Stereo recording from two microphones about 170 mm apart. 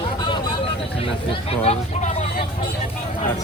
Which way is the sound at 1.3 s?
35° left (ahead or behind).